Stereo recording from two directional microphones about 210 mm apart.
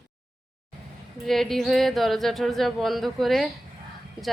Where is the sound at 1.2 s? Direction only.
Centre (ahead or behind).